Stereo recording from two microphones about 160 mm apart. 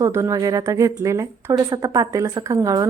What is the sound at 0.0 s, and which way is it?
Speech, 20° right (ahead or behind).